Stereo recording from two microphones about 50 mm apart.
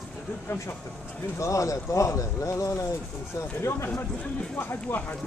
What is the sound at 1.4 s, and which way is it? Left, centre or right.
Speech, left.